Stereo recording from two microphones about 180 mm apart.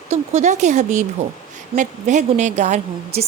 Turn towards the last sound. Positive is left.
turn(degrees=-40)  # may be behind; listen again after turning